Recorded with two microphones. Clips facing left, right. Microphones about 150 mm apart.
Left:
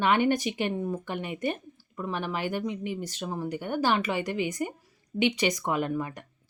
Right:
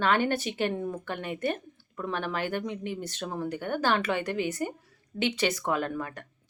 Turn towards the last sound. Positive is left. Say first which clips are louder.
# left 2 dB
turn(degrees=10)  # may be behind; listen again after turning